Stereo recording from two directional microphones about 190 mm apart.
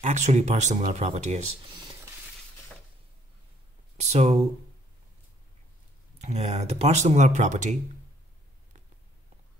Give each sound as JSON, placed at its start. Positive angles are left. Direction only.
{"t": 0.0, "sound": "speech", "side_deg": -40}
{"t": 4.0, "sound": "speech", "side_deg": -35}
{"t": 6.1, "sound": "speech", "side_deg": -35}